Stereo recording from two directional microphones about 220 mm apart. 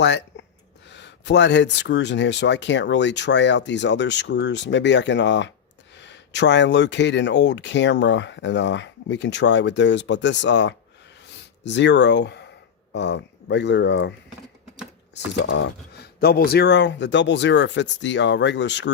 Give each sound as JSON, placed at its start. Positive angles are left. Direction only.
{"t": 0.0, "sound": "speech", "side_deg": 50}
{"t": 15.1, "sound": "speech", "side_deg": 55}